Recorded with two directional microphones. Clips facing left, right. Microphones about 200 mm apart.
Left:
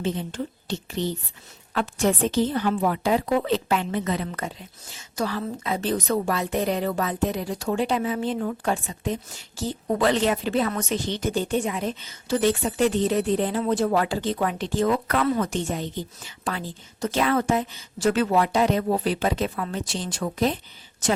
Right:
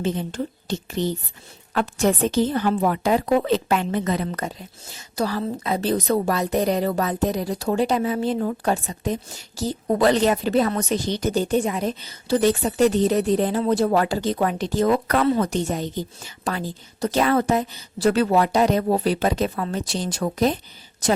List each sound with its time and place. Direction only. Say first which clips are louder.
0.0 s a woman's voice: right 3 dB; 45° right (ahead or behind)